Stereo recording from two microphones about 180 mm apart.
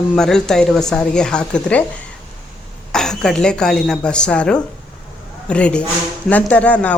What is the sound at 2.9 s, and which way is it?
A woman's voice, 5° left (ahead or behind).